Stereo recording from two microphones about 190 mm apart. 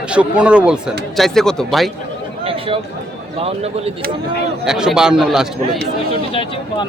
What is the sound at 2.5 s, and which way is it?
Speech, 30° right (ahead or behind).